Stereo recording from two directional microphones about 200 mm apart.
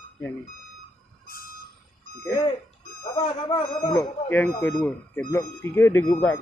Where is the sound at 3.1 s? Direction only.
20° left (ahead or behind).